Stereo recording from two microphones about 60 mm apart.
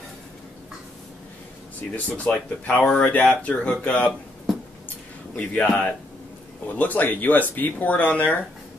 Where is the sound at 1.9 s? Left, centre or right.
Left.